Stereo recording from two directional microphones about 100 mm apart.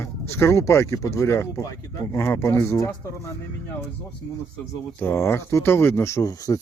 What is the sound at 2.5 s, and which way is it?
Speech, 30° left (ahead or behind).